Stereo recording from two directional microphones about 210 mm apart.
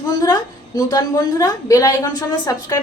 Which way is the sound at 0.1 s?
15° left (ahead or behind).